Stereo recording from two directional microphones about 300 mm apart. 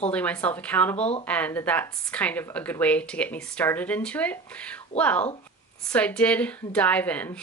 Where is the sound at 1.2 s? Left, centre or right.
Centre.